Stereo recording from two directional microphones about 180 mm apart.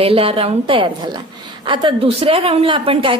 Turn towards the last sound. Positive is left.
turn(degrees=-30)  # may be behind; listen again after turning